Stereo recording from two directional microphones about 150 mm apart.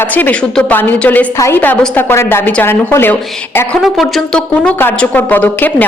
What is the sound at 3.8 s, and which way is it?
A woman's voice, centre (ahead or behind).